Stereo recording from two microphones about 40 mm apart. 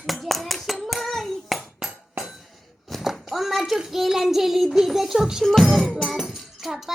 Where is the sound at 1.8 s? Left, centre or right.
Centre.